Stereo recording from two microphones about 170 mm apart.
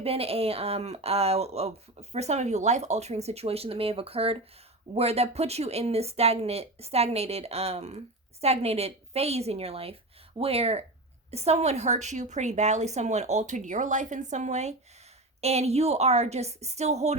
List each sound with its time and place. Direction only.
0.0 s a woman's voice: 35° right (ahead or behind)